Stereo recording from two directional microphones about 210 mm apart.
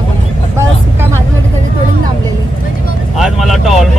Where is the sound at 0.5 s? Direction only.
10° right (ahead or behind).